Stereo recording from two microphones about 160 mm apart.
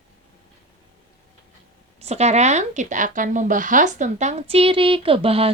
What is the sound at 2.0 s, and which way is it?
Speech, 45° right (ahead or behind).